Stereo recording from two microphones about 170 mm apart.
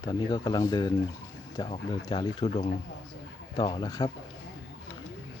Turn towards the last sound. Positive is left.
turn(degrees=25)  # may be behind; listen again after turning